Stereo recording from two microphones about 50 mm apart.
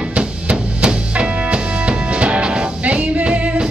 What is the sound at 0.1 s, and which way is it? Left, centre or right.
Music, right.